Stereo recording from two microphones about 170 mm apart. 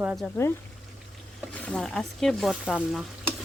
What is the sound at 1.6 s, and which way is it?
Speech, 5° left (ahead or behind).